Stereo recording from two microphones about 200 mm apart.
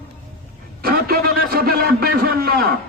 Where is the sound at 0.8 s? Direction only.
50° right (ahead or behind).